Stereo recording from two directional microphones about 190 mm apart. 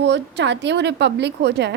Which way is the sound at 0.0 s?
65° right (ahead or behind).